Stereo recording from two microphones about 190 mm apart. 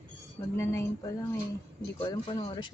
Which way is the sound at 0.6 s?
15° left (ahead or behind).